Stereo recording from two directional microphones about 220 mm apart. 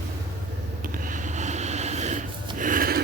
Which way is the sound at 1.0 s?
35° right (ahead or behind).